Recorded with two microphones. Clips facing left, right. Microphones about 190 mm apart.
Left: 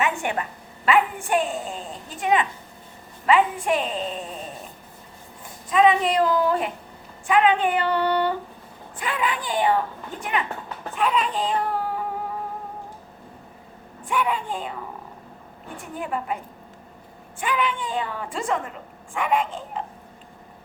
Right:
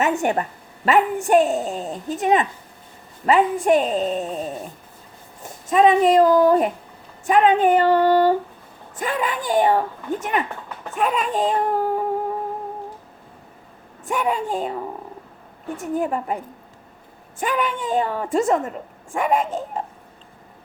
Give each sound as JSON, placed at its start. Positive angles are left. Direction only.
{"t": 0.0, "sound": "a woman's voice", "side_deg": -40}
{"t": 5.4, "sound": "a woman's voice", "side_deg": -45}
{"t": 14.0, "sound": "a woman's voice", "side_deg": -45}
{"t": 15.8, "sound": "a woman's voice", "side_deg": -40}
{"t": 17.4, "sound": "a woman's voice", "side_deg": -45}